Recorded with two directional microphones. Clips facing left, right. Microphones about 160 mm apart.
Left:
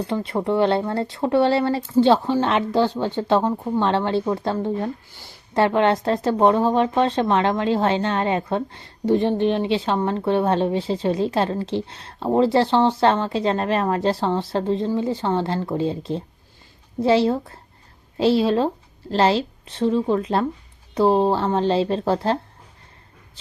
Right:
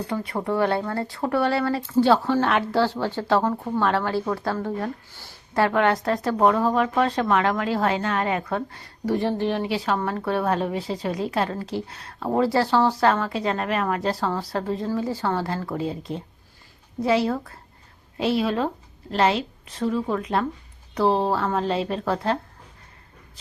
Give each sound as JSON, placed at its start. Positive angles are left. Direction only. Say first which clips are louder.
{"t": 0.1, "sound": "speech", "louder": "left 3 dB", "side_deg": 25}